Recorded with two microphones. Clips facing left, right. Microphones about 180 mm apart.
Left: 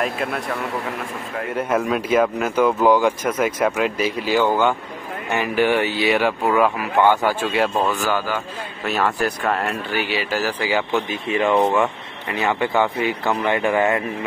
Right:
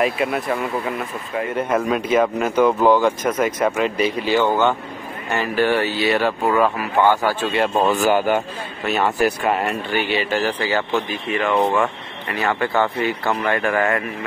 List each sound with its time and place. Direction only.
0.0 s speech: 5° right (ahead or behind)
1.6 s speech: 5° left (ahead or behind)
8.1 s a man's voice: 20° right (ahead or behind)
8.8 s speech: centre (ahead or behind)
11.1 s speech: 20° left (ahead or behind)
11.5 s speech: 5° left (ahead or behind)
12.3 s speech: 20° left (ahead or behind)